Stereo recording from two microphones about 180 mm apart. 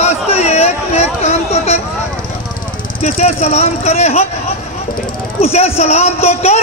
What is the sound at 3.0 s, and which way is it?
A man's voice, 35° left (ahead or behind).